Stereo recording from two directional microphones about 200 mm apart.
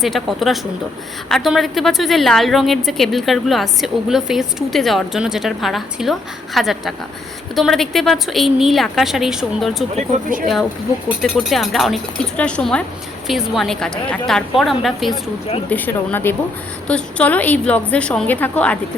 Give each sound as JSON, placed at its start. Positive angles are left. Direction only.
{"t": 0.0, "sound": "a woman's voice", "side_deg": 0}
{"t": 9.9, "sound": "speech", "side_deg": -40}
{"t": 10.4, "sound": "a woman's voice", "side_deg": 0}